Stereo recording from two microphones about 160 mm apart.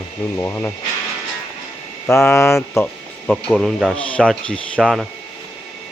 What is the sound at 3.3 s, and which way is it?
Speech, centre (ahead or behind).